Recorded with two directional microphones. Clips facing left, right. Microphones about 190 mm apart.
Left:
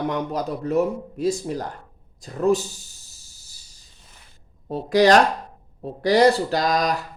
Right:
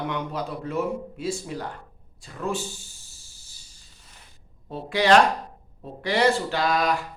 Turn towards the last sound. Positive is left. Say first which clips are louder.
# left 2 dB
turn(degrees=40)  # may be behind; listen again after turning